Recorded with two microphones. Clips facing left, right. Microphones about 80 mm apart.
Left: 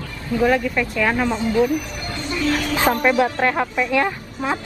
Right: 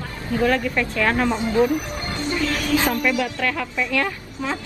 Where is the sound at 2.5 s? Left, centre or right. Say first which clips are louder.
Left 4 dB; left.